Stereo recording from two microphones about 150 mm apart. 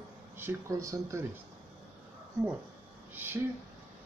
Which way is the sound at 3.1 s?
15° right (ahead or behind).